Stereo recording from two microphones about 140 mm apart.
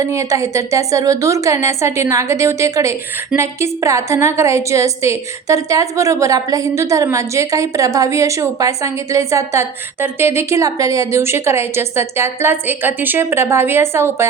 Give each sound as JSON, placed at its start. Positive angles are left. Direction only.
{"t": 0.0, "sound": "a woman's voice", "side_deg": -20}